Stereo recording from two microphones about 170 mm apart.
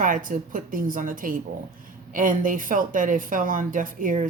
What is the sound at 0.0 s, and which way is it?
Speech, 55° right (ahead or behind).